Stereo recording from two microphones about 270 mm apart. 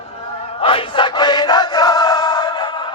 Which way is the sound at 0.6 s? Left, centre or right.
Centre.